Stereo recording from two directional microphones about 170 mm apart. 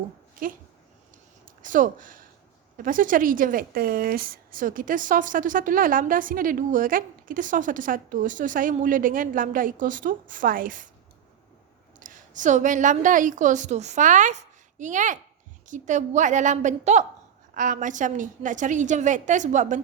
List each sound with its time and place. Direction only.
0.4 s speech: 55° right (ahead or behind)
1.6 s speech: 50° right (ahead or behind)
11.9 s a woman's voice: 50° right (ahead or behind)